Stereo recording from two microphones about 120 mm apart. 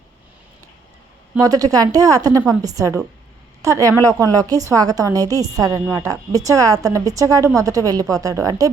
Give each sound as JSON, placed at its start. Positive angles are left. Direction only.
{"t": 1.4, "sound": "a woman's voice", "side_deg": -30}